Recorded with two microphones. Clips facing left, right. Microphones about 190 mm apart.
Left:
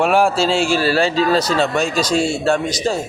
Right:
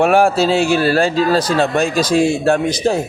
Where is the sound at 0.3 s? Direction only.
60° right (ahead or behind).